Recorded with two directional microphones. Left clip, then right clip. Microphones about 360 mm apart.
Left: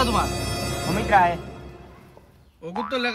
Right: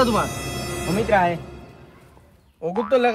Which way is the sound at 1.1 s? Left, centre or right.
Centre.